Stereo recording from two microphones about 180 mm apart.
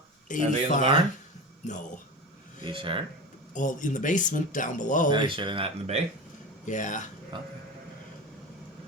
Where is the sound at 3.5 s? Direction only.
45° left (ahead or behind).